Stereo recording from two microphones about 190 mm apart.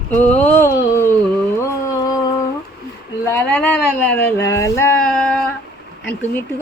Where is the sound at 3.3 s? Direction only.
10° left (ahead or behind).